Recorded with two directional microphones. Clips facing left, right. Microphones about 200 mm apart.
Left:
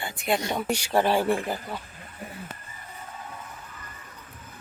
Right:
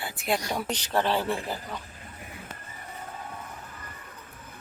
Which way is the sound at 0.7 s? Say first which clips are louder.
Left 4 dB; 10° left (ahead or behind).